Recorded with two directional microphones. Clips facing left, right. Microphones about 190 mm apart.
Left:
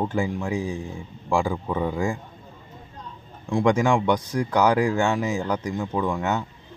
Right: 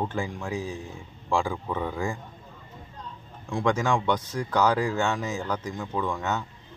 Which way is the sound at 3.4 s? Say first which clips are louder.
Left 5 dB; 15° left (ahead or behind).